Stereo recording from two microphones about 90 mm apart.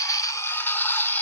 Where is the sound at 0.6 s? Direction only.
20° left (ahead or behind).